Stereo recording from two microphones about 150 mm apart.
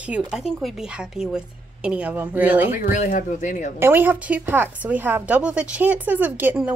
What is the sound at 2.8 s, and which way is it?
Speech, 60° left (ahead or behind).